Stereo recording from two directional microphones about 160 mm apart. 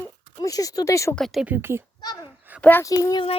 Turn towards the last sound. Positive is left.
turn(degrees=25)  # may be behind; listen again after turning